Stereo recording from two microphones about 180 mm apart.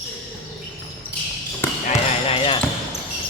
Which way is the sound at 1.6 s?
10° left (ahead or behind).